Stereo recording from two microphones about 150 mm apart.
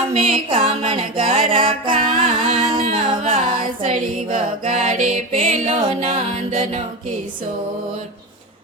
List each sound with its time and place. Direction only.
0.1 s music: 40° right (ahead or behind)